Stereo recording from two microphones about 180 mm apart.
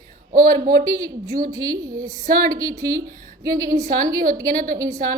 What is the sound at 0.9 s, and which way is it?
A woman's voice, 20° right (ahead or behind).